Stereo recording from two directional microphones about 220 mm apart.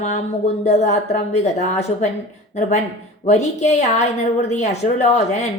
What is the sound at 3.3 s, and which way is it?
A woman's voice, 30° left (ahead or behind).